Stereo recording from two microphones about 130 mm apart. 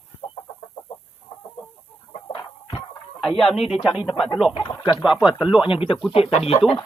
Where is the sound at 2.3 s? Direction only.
35° left (ahead or behind).